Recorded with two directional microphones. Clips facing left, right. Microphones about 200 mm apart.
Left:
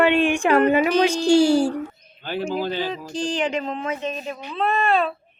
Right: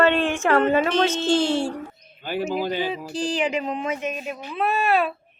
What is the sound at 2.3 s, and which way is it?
Speech, 10° right (ahead or behind).